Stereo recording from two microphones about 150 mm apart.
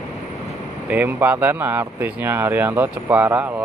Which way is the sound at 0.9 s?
10° right (ahead or behind).